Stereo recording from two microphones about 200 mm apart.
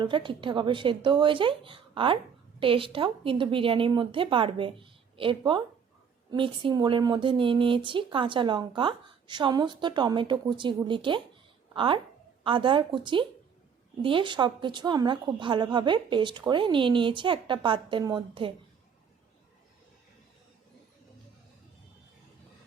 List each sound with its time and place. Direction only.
0.0 s speech: 25° right (ahead or behind)